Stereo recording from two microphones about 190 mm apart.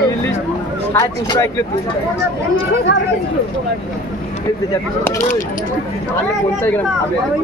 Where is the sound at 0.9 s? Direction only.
20° left (ahead or behind).